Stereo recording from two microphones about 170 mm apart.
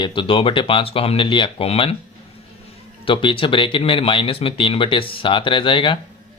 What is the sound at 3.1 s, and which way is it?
Speech, 30° left (ahead or behind).